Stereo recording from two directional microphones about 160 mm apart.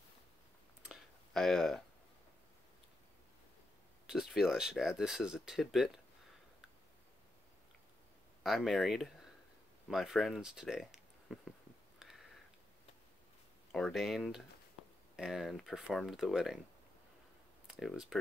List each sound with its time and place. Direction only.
0.8 s clicking: centre (ahead or behind)
4.1 s speech: 5° right (ahead or behind)
8.5 s speech: centre (ahead or behind)
12.0 s a sound: centre (ahead or behind)
13.7 s speech: 5° left (ahead or behind)
17.6 s speech: centre (ahead or behind)